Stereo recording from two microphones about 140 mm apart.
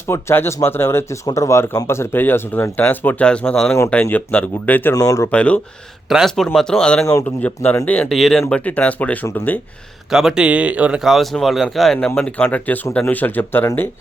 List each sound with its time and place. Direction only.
0.1 s speech: 20° left (ahead or behind)
5.3 s speech: 10° left (ahead or behind)
7.0 s speech: 25° left (ahead or behind)
7.3 s speech: 10° left (ahead or behind)
10.1 s speech: 5° right (ahead or behind); by 13.7 s 15° left (ahead or behind)